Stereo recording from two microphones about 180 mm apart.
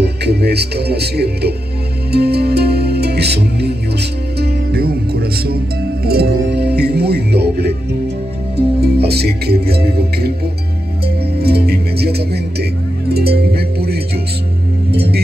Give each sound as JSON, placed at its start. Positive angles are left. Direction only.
{"t": 0.0, "sound": "music", "side_deg": -65}
{"t": 6.0, "sound": "speech", "side_deg": -60}
{"t": 11.3, "sound": "speech", "side_deg": -60}
{"t": 13.1, "sound": "music", "side_deg": -60}